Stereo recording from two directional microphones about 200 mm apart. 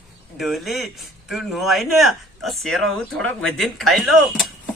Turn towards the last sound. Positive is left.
turn(degrees=0)  # may be behind; listen again after turning